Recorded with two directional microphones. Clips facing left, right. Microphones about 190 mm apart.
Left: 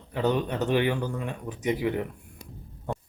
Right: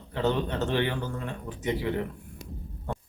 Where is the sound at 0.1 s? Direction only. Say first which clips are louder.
Left 1 dB; 15° left (ahead or behind).